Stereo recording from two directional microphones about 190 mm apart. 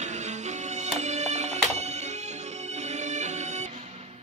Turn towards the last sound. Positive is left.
turn(degrees=-40)  # may be behind; listen again after turning